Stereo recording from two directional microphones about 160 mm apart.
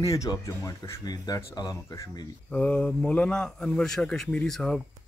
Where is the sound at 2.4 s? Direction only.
5° left (ahead or behind).